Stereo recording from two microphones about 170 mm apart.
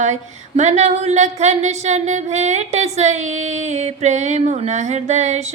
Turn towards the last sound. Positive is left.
turn(degrees=-45)  # may be behind; listen again after turning